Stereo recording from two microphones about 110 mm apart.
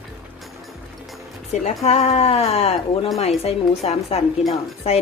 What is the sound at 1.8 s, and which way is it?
Speech, 80° left.